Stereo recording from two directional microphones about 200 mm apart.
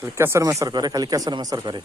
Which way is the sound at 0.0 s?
10° right (ahead or behind).